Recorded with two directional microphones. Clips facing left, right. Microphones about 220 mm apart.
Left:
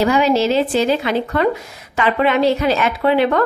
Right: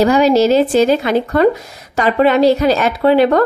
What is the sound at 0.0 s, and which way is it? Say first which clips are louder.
Speech: right 4 dB; 40° right (ahead or behind).